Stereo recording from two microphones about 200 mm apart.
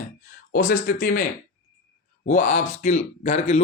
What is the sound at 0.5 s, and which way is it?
Speech, 45° left (ahead or behind).